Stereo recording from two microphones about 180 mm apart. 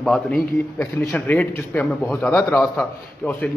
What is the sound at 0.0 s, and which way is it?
A man's voice, 5° left (ahead or behind).